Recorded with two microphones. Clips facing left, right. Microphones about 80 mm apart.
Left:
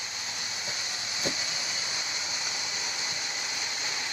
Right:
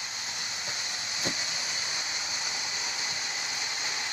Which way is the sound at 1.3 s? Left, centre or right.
Right.